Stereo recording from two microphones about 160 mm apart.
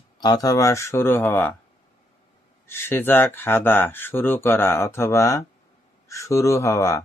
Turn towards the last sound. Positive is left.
turn(degrees=20)  # may be behind; listen again after turning